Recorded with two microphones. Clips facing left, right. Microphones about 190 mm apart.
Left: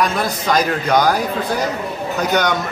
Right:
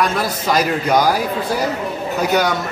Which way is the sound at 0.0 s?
5° right (ahead or behind).